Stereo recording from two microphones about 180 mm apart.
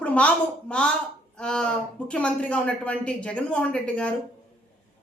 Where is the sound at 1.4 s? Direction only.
5° left (ahead or behind).